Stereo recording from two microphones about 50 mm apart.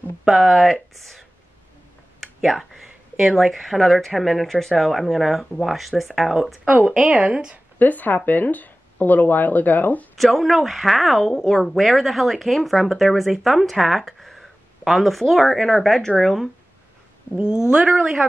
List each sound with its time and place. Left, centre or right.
0.2 s a woman's voice: centre
0.5 s a woman's voice: centre
2.4 s a woman's voice: centre
6.6 s a woman's voice: right
6.9 s a woman's voice: centre
7.8 s speech: left
10.1 s a woman's voice: centre
17.6 s a woman's voice: centre